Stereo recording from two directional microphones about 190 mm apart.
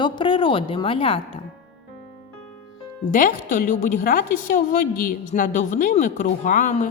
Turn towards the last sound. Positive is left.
turn(degrees=40)  # may be behind; listen again after turning